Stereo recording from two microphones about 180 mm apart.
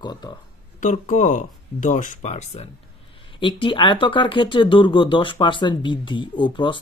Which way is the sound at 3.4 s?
25° left (ahead or behind).